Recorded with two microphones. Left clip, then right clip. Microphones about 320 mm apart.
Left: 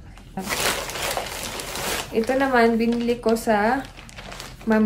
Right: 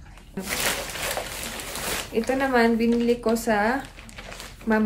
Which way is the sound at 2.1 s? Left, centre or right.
Centre.